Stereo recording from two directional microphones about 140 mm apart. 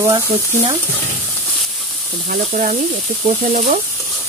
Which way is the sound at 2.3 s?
60° right (ahead or behind).